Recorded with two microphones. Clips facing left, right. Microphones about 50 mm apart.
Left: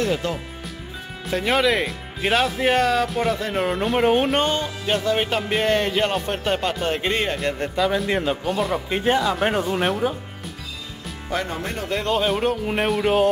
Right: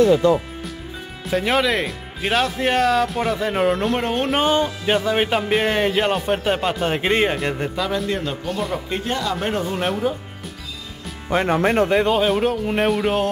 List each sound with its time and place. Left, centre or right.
1.3 s speech: centre
4.3 s music: centre
7.7 s speech: centre
8.1 s speech: centre
8.5 s speech: centre
11.4 s speech: right
11.9 s music: centre
12.2 s speech: centre